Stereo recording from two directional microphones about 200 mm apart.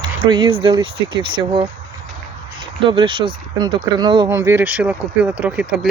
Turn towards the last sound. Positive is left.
turn(degrees=-5)  # may be behind; listen again after turning